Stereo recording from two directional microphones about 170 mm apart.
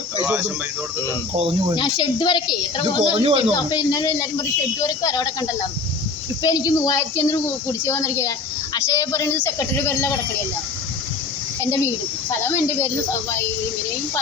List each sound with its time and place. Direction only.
1.7 s a woman's voice: 25° left (ahead or behind)
3.0 s speech: 35° right (ahead or behind)
3.5 s a woman's voice: 25° left (ahead or behind)
11.6 s speech: 15° left (ahead or behind)